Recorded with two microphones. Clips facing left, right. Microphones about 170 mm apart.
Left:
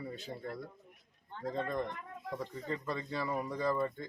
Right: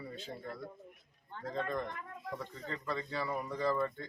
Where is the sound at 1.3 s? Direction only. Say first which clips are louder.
Left 1 dB; 20° left (ahead or behind).